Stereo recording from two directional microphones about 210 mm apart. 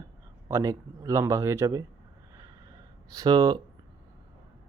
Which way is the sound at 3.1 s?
20° right (ahead or behind).